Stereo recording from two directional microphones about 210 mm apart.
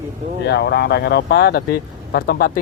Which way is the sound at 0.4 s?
50° left (ahead or behind).